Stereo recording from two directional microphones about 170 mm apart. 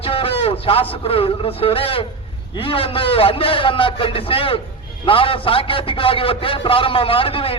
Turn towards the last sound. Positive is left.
turn(degrees=30)  # may be behind; listen again after turning